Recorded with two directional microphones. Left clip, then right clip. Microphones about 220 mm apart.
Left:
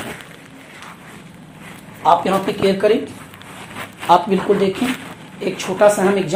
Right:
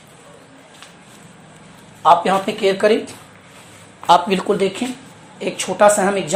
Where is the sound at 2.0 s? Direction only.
35° right (ahead or behind).